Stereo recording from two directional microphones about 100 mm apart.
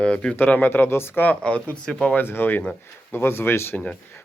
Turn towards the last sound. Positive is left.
turn(degrees=25)  # may be behind; listen again after turning